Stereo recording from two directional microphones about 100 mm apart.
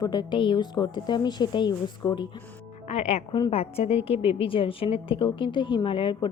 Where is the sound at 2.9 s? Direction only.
90° left.